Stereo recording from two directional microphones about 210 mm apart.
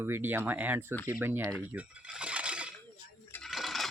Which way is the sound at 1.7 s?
5° right (ahead or behind).